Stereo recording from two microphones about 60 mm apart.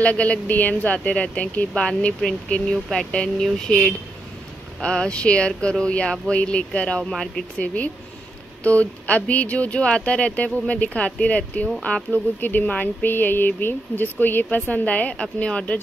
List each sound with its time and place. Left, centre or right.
0.0 s speech: left
2.7 s speech: centre
7.1 s speech: centre
7.5 s speech: left